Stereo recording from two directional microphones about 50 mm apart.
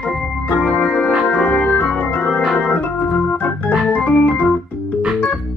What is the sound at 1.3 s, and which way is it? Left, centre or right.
Organ, centre.